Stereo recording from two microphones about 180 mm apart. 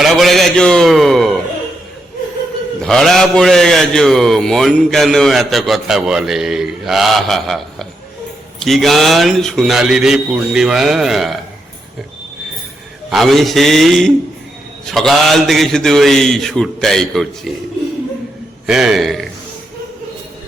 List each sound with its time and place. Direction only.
0.0 s a sound: centre (ahead or behind)
2.8 s a man's voice: 5° left (ahead or behind)
13.1 s a man's voice: centre (ahead or behind)
18.6 s a man's voice: centre (ahead or behind)